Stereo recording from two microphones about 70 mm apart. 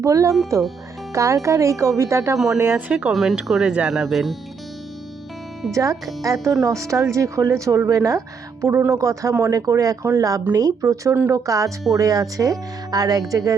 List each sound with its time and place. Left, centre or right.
0.0 s speech: right
2.7 s speech: centre
3.1 s speech: centre
3.9 s speech: centre
5.7 s speech: right
8.6 s speech: right
8.9 s speech: right